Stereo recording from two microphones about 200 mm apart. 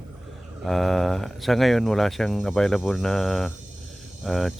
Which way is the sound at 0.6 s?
Centre (ahead or behind).